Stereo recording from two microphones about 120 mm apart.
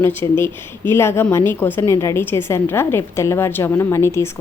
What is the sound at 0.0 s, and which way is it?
A woman's voice, 20° left (ahead or behind).